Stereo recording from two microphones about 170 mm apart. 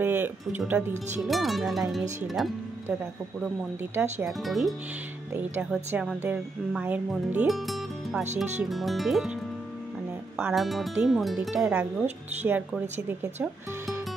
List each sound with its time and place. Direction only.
0.0 s speech: 10° right (ahead or behind)
0.9 s speech: 45° right (ahead or behind)
1.2 s speech: centre (ahead or behind)
3.9 s a woman's voice: 10° right (ahead or behind)
4.3 s a woman's voice: centre (ahead or behind)